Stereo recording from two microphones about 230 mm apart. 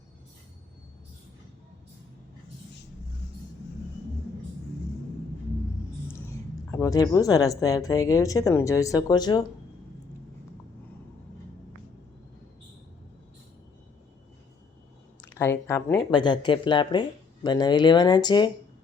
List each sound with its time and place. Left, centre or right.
6.7 s speech: centre
15.2 s speech: centre